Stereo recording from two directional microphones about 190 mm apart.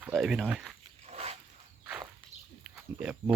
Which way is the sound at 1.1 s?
35° right (ahead or behind).